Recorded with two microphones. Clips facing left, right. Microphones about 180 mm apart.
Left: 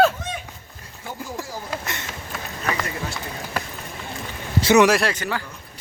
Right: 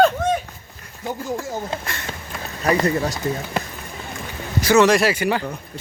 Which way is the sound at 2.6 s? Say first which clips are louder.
Right 9 dB; 35° right (ahead or behind).